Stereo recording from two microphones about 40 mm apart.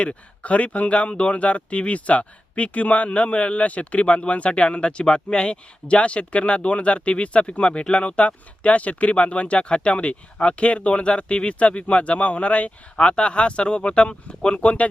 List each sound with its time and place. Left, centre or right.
0.0 s speech: left